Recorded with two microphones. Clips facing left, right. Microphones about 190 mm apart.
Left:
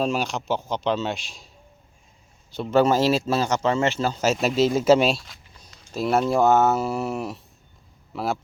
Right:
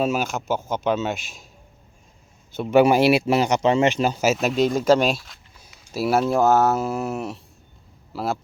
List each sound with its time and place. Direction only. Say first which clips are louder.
0.0 s speech: right 2 dB; 5° right (ahead or behind)
2.6 s speech: right 3 dB; 10° right (ahead or behind)